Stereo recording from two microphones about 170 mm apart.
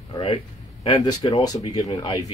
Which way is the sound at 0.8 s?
25° left (ahead or behind).